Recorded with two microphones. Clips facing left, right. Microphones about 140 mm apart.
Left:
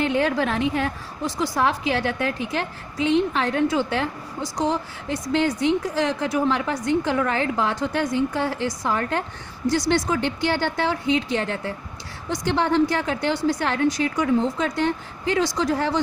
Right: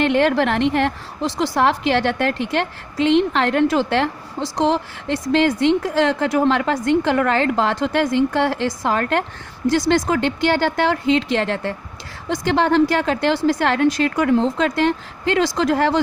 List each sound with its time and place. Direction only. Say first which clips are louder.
0.0 s a woman's voice: right 5 dB; 75° right (ahead or behind); by 6.2 s 90° right
6.3 s a woman's voice: right 5 dB; 65° right (ahead or behind)
14.6 s a woman's voice: right 5 dB; 90° right